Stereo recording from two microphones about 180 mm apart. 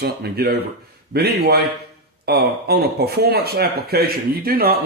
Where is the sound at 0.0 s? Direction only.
65° right (ahead or behind).